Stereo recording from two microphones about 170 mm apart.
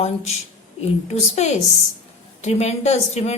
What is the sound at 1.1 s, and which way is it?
A woman's voice, 40° left (ahead or behind).